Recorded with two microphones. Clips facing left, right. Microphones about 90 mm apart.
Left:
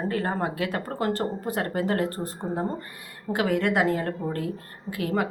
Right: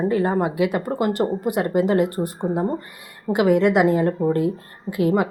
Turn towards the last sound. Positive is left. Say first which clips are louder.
# right 7 dB
turn(degrees=-20)  # may be behind; listen again after turning